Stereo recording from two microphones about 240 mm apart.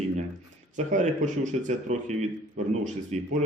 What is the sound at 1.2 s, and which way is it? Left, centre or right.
A man's voice, right.